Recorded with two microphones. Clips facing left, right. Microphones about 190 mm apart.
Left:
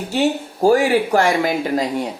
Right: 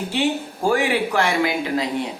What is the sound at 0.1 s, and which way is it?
Speech, 40° left (ahead or behind).